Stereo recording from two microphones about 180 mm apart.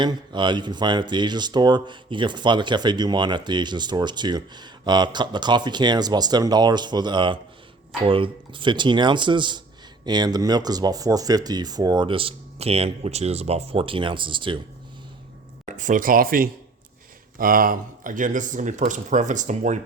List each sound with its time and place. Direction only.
0.0 s speech: 25° right (ahead or behind)
15.6 s speech: 45° right (ahead or behind)